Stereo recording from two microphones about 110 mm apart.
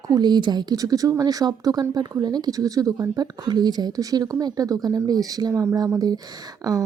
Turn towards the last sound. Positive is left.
turn(degrees=-35)  # may be behind; listen again after turning